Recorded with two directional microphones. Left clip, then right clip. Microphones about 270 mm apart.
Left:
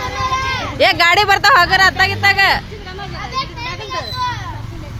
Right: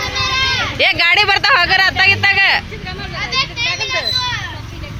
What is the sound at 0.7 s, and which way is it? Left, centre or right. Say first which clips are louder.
Speech: left 2 dB; centre.